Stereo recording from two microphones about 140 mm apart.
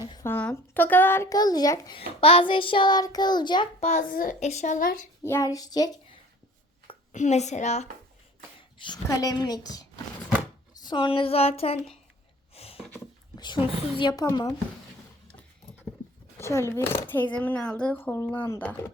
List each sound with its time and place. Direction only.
0.3 s speech: 15° left (ahead or behind)
2.0 s child singing: 45° left (ahead or behind)
3.8 s a child's voice: 50° left (ahead or behind)
4.1 s a woman's voice: 90° left
4.4 s a woman's voice: 55° left (ahead or behind); by 4.9 s 70° left (ahead or behind)
5.2 s speech: 20° left (ahead or behind)
7.1 s a woman's voice: 60° left (ahead or behind)
9.0 s speech: 25° left (ahead or behind)
10.8 s child singing: 35° left (ahead or behind)
12.5 s a sound: 45° left (ahead or behind)
13.3 s a sound: 30° left (ahead or behind)
13.9 s speech: 30° left (ahead or behind)
16.4 s speech: 20° left (ahead or behind)